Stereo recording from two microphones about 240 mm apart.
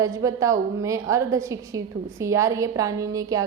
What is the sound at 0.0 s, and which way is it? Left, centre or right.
A woman's voice, centre.